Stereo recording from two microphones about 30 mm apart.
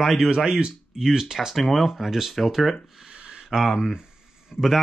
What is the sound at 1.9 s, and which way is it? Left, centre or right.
Speech, centre.